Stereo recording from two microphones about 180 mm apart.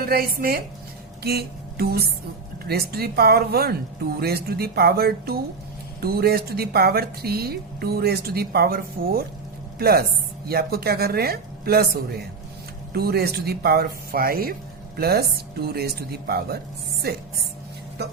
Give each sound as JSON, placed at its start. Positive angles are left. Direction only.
{"t": 0.0, "sound": "speech", "side_deg": -55}
{"t": 1.2, "sound": "music", "side_deg": -60}
{"t": 2.6, "sound": "a woman's voice", "side_deg": -60}